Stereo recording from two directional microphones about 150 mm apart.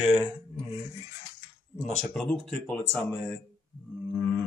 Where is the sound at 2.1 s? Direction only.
5° left (ahead or behind).